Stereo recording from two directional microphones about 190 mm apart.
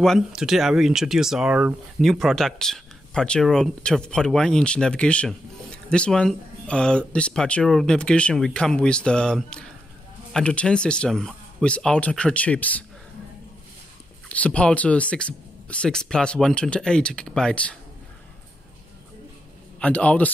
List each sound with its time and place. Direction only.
0.0 s speech: centre (ahead or behind)
14.3 s speech: 5° left (ahead or behind)
19.8 s speech: 5° left (ahead or behind)